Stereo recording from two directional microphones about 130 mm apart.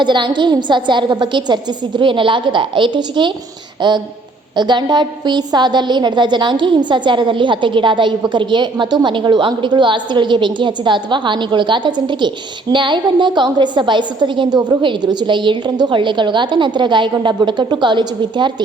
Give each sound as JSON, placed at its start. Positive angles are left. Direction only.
{"t": 0.0, "sound": "a woman's voice", "side_deg": -35}